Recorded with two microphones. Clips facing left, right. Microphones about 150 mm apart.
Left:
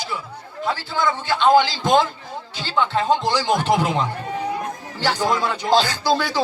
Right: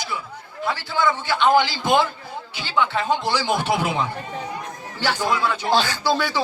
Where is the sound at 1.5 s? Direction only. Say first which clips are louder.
Left 3 dB; 15° right (ahead or behind).